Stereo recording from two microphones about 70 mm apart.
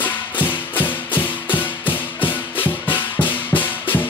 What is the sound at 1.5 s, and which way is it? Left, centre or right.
Music, left.